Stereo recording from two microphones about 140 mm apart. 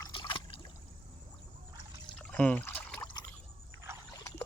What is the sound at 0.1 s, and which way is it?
Trickle, 35° left (ahead or behind).